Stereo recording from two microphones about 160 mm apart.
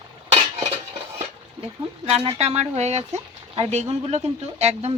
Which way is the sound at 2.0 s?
40° right (ahead or behind).